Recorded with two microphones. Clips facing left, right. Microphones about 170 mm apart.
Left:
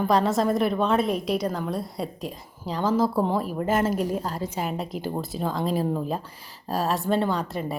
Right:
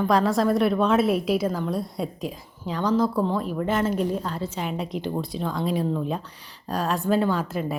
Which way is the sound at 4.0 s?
10° left (ahead or behind).